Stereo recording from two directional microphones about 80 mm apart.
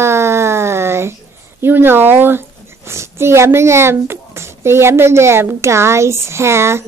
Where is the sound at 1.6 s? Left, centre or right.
Right.